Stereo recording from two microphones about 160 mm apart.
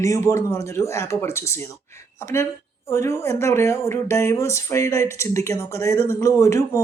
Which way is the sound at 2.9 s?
15° left (ahead or behind).